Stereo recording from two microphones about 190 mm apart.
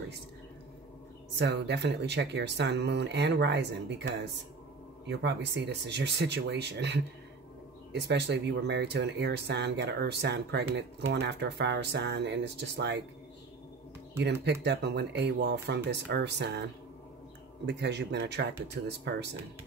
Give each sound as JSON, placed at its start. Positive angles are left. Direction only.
{"t": 1.4, "sound": "speech", "side_deg": -65}
{"t": 14.4, "sound": "speech", "side_deg": -60}
{"t": 17.6, "sound": "speech", "side_deg": -60}